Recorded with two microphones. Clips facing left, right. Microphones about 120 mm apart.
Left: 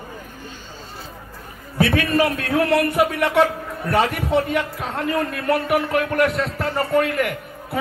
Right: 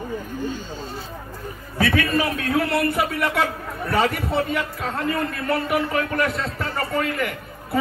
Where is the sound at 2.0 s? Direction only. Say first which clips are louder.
Left 3 dB; 75° left (ahead or behind).